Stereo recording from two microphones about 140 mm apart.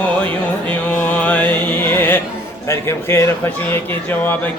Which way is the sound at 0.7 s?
10° left (ahead or behind).